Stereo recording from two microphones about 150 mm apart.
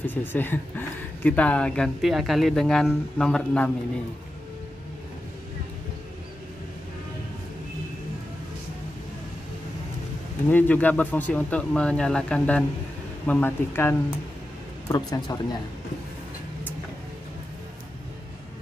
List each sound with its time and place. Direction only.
0.0 s speech: 15° left (ahead or behind)
10.5 s speech: 10° left (ahead or behind)
14.9 s speech: 25° left (ahead or behind)